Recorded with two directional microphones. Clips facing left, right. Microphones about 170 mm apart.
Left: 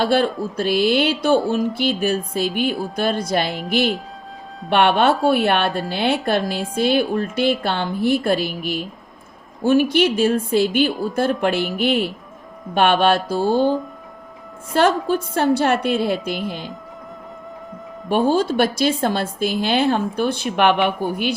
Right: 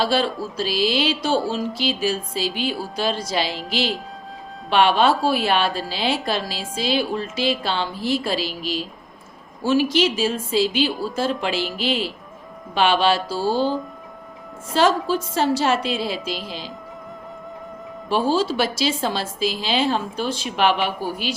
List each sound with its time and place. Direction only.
0.0 s a woman's voice: 55° left (ahead or behind)
14.7 s a woman's voice: 55° left (ahead or behind)
18.1 s a woman's voice: 55° left (ahead or behind)